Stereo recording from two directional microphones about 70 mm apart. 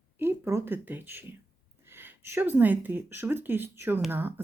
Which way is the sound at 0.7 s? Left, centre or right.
Right.